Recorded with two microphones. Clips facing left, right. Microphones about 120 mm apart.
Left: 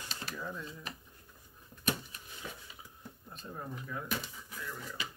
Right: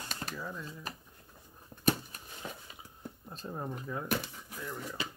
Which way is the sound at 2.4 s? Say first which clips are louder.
Right 2 dB; 25° right (ahead or behind).